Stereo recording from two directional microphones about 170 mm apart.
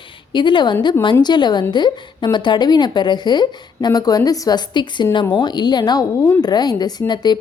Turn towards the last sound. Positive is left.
turn(degrees=25)  # may be behind; listen again after turning